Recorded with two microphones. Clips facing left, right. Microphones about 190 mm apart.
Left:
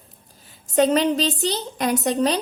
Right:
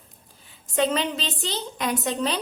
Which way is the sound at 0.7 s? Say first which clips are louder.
Left 6 dB; 40° left (ahead or behind).